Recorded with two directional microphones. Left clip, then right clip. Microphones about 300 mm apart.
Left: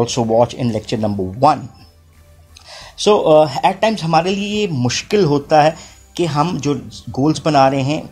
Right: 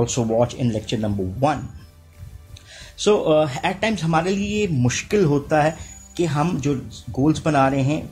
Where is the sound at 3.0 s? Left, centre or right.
Left.